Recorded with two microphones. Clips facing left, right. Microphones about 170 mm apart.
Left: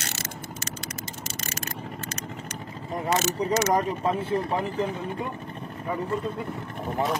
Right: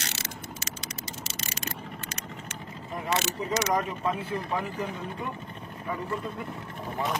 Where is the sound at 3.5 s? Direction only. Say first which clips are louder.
Left 3 dB; 45° left (ahead or behind).